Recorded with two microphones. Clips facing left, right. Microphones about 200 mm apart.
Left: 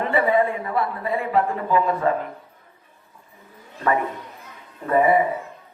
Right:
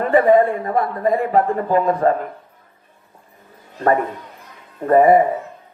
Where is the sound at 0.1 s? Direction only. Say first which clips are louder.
Right 7 dB; 50° right (ahead or behind).